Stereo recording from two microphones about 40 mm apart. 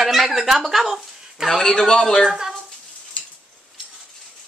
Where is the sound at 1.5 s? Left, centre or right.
Centre.